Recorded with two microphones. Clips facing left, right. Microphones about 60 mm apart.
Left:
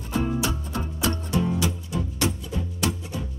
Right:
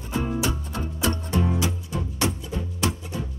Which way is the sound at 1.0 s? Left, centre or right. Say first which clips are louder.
Even; right.